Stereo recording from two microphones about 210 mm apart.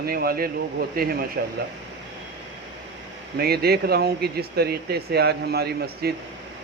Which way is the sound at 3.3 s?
50° right (ahead or behind).